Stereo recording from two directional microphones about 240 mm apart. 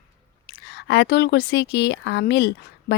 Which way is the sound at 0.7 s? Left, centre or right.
Left.